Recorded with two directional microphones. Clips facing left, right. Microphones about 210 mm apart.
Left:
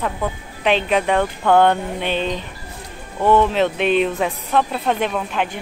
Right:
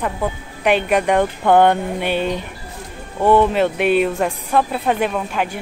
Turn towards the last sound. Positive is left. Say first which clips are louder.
# right 1 dB
turn(degrees=-5)  # may be behind; listen again after turning